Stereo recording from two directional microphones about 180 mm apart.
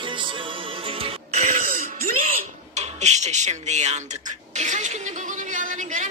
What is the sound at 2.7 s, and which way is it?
Speech, 40° right (ahead or behind).